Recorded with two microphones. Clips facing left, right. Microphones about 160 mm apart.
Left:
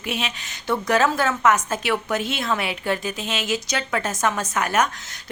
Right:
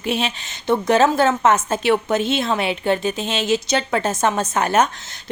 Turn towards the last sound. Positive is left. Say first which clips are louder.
# right 4 dB
turn(degrees=-30)  # may be behind; listen again after turning